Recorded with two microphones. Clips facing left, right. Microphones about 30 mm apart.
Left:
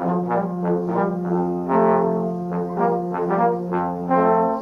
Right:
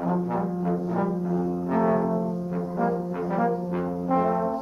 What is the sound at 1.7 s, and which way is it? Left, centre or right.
Music, centre.